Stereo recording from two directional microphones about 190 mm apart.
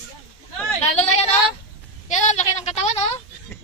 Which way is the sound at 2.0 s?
40° left (ahead or behind).